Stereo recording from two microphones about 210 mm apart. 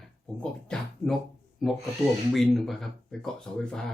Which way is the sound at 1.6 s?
Centre (ahead or behind).